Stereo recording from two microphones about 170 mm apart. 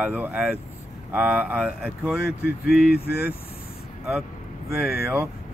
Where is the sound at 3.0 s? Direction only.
65° left (ahead or behind).